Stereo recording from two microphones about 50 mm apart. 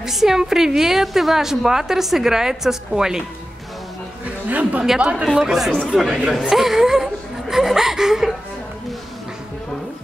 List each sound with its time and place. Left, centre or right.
0.0 s a woman's voice: centre
4.5 s a woman's voice: right
4.8 s a woman's voice: centre
5.9 s speech: centre
6.5 s whimper: centre